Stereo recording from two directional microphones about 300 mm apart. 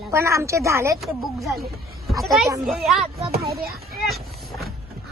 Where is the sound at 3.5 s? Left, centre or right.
Right.